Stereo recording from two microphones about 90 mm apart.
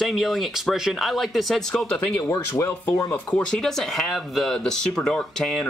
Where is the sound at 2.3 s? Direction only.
35° left (ahead or behind).